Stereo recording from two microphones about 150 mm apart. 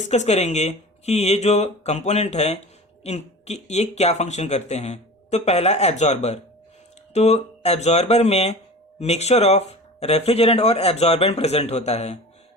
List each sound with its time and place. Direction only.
0.0 s speech: 50° left (ahead or behind)